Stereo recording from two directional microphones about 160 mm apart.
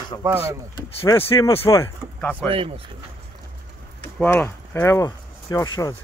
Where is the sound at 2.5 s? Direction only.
35° right (ahead or behind).